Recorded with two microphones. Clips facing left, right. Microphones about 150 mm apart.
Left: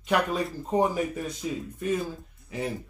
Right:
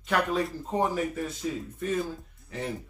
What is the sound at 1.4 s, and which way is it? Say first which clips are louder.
Speech: even; 10° left (ahead or behind).